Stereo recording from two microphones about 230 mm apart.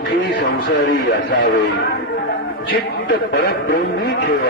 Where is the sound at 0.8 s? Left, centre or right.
Left.